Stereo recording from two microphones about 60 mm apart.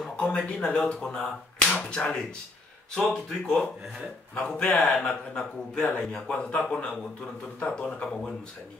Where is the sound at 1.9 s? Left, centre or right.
Centre.